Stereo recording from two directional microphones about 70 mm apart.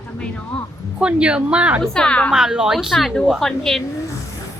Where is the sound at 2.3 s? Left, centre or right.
Centre.